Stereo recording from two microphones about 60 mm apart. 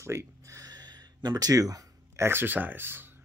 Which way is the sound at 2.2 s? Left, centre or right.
Right.